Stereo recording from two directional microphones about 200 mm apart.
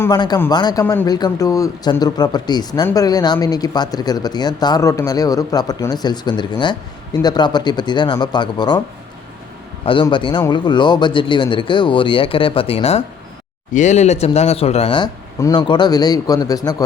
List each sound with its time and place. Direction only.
0.0 s a man's voice: 20° left (ahead or behind)
9.8 s a man's voice: 25° left (ahead or behind)